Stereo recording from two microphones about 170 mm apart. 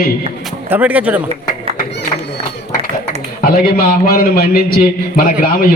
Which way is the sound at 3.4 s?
60° left (ahead or behind).